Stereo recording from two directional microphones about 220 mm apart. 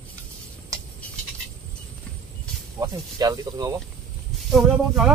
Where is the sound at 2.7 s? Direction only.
15° right (ahead or behind).